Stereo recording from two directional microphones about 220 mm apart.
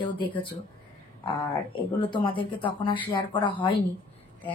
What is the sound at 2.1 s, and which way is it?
Speech, 20° left (ahead or behind).